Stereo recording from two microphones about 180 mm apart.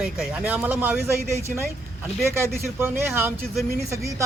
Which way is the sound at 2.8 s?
10° right (ahead or behind).